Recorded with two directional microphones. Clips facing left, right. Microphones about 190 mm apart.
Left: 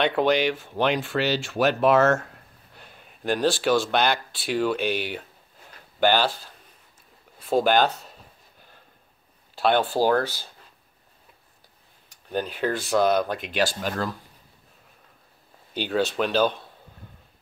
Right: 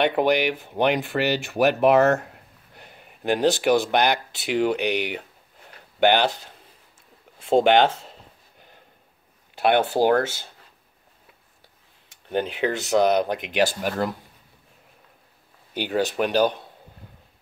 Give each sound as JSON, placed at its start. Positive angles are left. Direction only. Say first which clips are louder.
{"t": 0.0, "sound": "speech", "louder": "right 1 dB", "side_deg": -15}
{"t": 2.7, "sound": "a sound", "louder": "right 2 dB", "side_deg": -15}
{"t": 3.3, "sound": "speech", "louder": "right 2 dB", "side_deg": -20}
{"t": 9.6, "sound": "speech", "louder": "right 2 dB", "side_deg": -65}
{"t": 12.6, "sound": "speech", "louder": "right 1 dB", "side_deg": -15}
{"t": 15.7, "sound": "speech", "louder": "right 1 dB", "side_deg": -15}